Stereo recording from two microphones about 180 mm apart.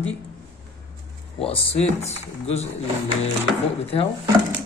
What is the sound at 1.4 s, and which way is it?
Speech, 30° left (ahead or behind).